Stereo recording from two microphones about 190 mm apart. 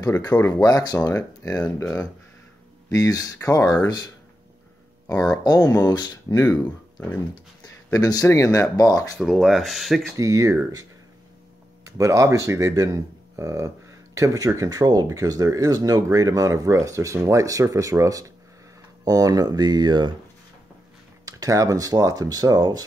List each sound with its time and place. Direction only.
0.0 s speech: 20° left (ahead or behind)
5.3 s speech: 20° left (ahead or behind)
6.4 s speech: 10° left (ahead or behind)
7.6 s speech: 20° left (ahead or behind)
9.2 s speech: centre (ahead or behind)
10.1 s speech: 15° right (ahead or behind)
12.0 s speech: 15° right (ahead or behind)
21.3 s speech: 20° right (ahead or behind)